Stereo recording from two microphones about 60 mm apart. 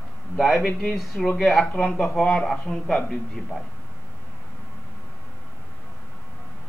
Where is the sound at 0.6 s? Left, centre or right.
Left.